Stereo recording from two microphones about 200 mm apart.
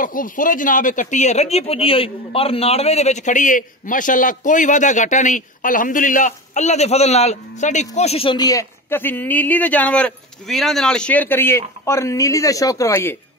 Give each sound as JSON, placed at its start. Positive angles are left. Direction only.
{"t": 0.0, "sound": "speech", "side_deg": 45}